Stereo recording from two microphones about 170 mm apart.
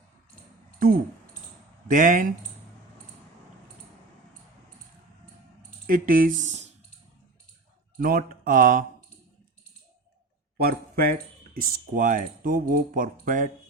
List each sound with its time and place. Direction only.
1.9 s speech: 50° right (ahead or behind)
5.8 s speech: 55° right (ahead or behind)
7.9 s speech: 60° right (ahead or behind)
10.6 s speech: 65° right (ahead or behind)